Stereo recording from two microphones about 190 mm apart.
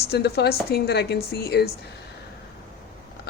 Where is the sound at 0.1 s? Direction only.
60° left (ahead or behind).